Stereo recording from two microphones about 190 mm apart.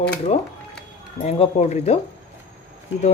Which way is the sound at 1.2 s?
35° left (ahead or behind).